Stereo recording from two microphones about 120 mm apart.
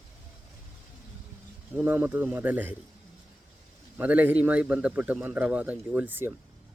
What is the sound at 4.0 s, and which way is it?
Speech, 15° right (ahead or behind).